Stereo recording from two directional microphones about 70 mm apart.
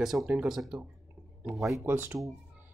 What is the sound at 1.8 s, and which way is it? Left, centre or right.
Speech, right.